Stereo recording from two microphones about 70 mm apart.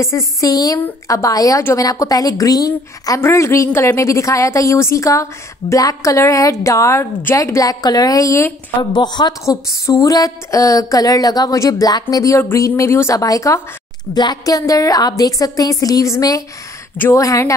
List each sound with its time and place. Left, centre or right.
0.0 s a woman's voice: left
3.2 s a woman's voice: left
7.8 s a woman's voice: left
8.9 s speech: left
9.5 s a woman's voice: left
11.5 s a woman's voice: left
13.1 s a woman's voice: left
14.1 s a woman's voice: left